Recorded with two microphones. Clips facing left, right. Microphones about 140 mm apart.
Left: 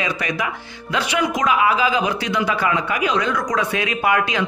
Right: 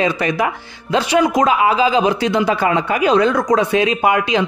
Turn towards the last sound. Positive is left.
turn(degrees=-25)  # may be behind; listen again after turning